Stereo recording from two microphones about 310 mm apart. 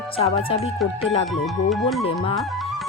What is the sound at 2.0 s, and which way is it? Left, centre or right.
Speech, centre.